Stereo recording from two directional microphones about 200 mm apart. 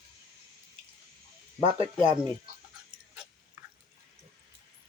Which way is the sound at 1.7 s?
25° right (ahead or behind).